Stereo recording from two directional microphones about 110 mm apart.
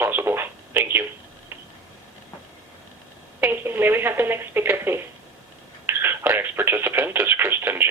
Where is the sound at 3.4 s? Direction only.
20° right (ahead or behind).